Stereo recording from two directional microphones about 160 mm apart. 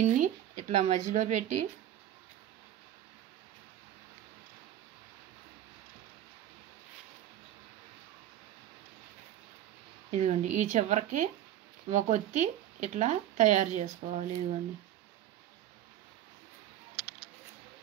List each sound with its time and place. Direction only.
0.0 s speech: 50° right (ahead or behind)
10.1 s speech: 50° right (ahead or behind)